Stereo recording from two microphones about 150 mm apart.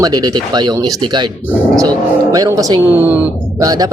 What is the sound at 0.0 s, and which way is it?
Speech, 25° right (ahead or behind).